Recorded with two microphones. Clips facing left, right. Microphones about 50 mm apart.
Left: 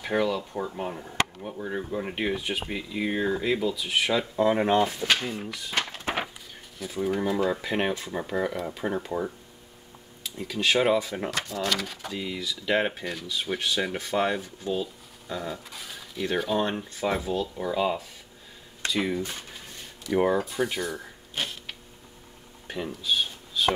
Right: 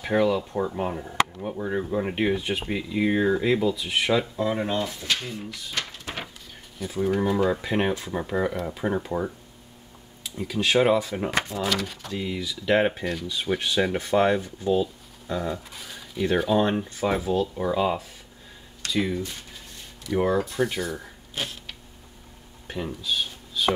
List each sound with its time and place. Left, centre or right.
0.0 s speech: centre
4.6 s speech: left
6.8 s speech: centre
11.2 s speech: right
11.6 s speech: centre
18.9 s speech: centre
22.7 s a sound: centre